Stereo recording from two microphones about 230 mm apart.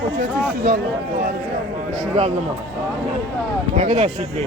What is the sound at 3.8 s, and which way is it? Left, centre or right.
Speech, right.